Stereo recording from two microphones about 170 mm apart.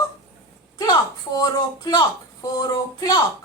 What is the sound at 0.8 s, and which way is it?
Speech, 20° left (ahead or behind).